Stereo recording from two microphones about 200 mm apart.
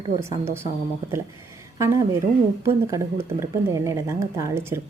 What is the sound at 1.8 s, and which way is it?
Speech, 15° right (ahead or behind).